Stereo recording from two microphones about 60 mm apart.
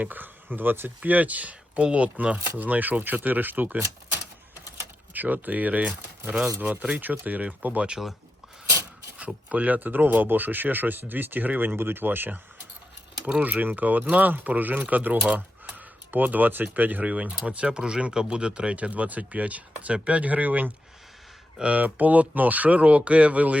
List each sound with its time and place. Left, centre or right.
0.0 s speech: right
5.1 s speech: right
7.9 s speech: centre
9.1 s speech: right
13.4 s speech: right